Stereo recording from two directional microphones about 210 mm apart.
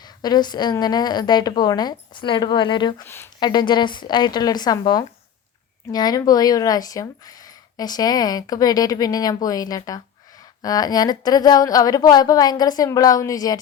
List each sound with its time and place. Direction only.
0.2 s a woman's voice: 20° left (ahead or behind)
3.0 s a woman's voice: 10° left (ahead or behind)